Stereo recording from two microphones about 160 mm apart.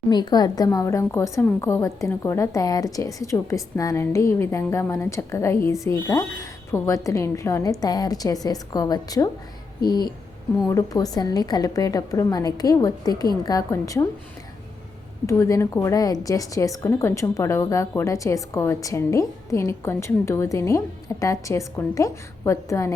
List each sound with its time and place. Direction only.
0.1 s speech: 25° left (ahead or behind)
15.3 s speech: 20° left (ahead or behind)